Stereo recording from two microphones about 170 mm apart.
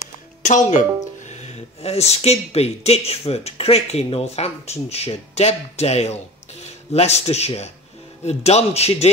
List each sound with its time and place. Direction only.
0.4 s speech: 45° left (ahead or behind)